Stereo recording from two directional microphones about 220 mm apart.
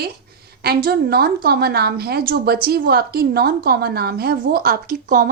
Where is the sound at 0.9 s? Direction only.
45° right (ahead or behind).